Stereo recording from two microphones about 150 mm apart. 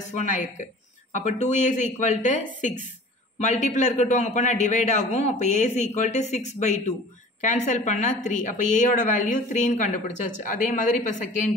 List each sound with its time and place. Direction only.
0.1 s a woman's voice: 55° left (ahead or behind)